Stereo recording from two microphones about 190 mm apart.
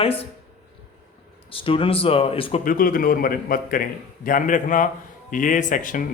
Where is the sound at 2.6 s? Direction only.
50° left (ahead or behind).